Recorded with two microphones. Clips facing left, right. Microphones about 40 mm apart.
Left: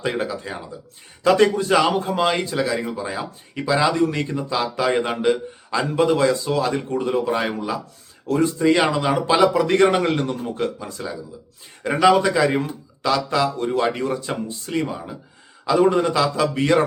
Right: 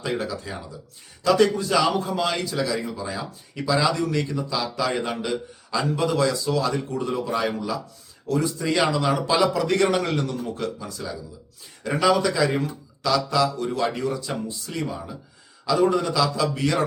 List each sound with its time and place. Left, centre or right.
0.0 s speech: left
1.2 s a man's voice: left
14.8 s a man's voice: left